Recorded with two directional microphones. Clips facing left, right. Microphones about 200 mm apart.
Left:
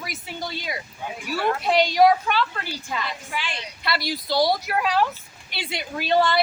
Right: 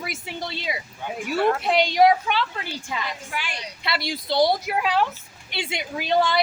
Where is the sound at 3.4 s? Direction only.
10° right (ahead or behind).